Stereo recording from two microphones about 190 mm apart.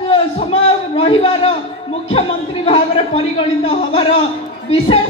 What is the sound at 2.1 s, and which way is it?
A man's voice, 30° left (ahead or behind).